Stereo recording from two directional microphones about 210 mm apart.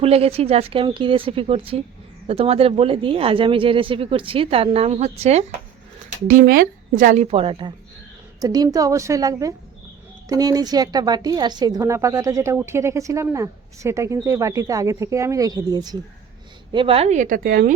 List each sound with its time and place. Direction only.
0.0 s speech: 30° right (ahead or behind)
6.2 s speech: 45° right (ahead or behind)
7.0 s a woman's voice: 35° right (ahead or behind)